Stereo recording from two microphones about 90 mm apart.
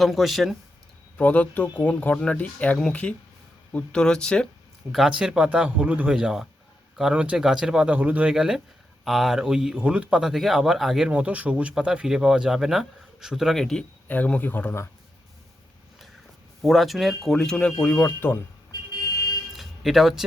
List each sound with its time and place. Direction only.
0.0 s speech: centre (ahead or behind)
1.2 s speech: 15° left (ahead or behind)
4.9 s speech: 5° right (ahead or behind)
8.3 s speech: 5° right (ahead or behind)
11.1 s speech: 15° right (ahead or behind); by 13.8 s 5° left (ahead or behind)
14.1 s speech: 20° left (ahead or behind)
16.6 s speech: centre (ahead or behind)
17.9 s speech: 25° left (ahead or behind)
19.5 s music: centre (ahead or behind)